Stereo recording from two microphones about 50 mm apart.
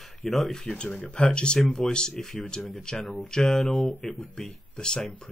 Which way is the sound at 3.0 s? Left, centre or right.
Centre.